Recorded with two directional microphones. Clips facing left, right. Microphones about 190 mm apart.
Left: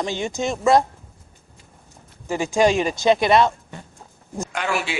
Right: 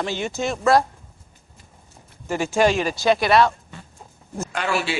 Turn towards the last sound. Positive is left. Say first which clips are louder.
# right 1 dB
turn(degrees=15)  # may be behind; listen again after turning